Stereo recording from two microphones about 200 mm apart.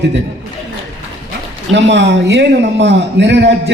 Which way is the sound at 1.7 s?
60° right (ahead or behind).